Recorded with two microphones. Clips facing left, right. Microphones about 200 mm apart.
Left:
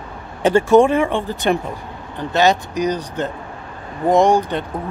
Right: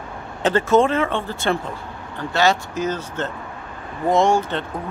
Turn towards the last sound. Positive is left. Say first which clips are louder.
# left 3 dB
turn(degrees=15)  # may be behind; listen again after turning